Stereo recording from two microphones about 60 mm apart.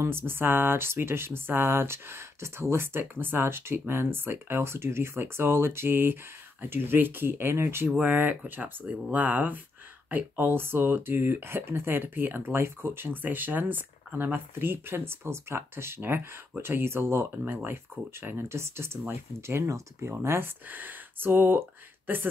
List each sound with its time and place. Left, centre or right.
0.0 s speech: right
8.0 s speech: right
19.6 s speech: right
20.2 s speech: right